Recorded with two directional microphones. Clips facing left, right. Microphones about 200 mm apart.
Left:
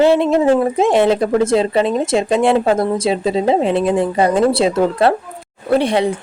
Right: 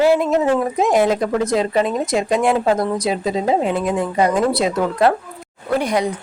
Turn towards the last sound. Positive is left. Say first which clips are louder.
# left 4 dB
turn(degrees=30)  # may be behind; listen again after turning